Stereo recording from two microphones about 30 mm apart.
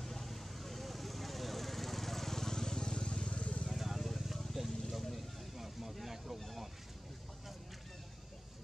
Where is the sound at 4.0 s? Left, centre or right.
Centre.